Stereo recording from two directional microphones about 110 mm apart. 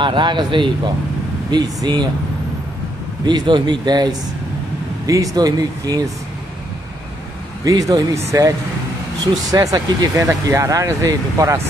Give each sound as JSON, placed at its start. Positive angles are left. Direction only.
{"t": 0.0, "sound": "speech", "side_deg": -45}
{"t": 3.3, "sound": "speech", "side_deg": -45}
{"t": 7.6, "sound": "speech", "side_deg": -35}